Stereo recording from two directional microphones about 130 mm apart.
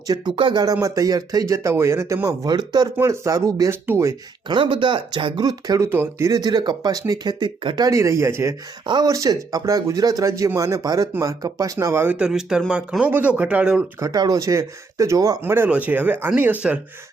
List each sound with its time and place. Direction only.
0.1 s speech: 35° right (ahead or behind); by 4.1 s 20° right (ahead or behind)
4.4 s speech: 40° right (ahead or behind)
5.9 s speech: 20° right (ahead or behind); by 7.9 s 40° right (ahead or behind)
7.9 s speech: 25° right (ahead or behind)
14.0 s speech: 30° right (ahead or behind); by 16.8 s 10° right (ahead or behind)